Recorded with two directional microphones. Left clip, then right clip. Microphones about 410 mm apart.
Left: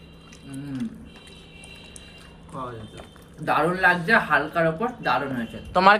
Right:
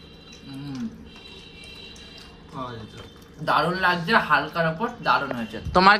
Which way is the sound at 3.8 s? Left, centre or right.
Left.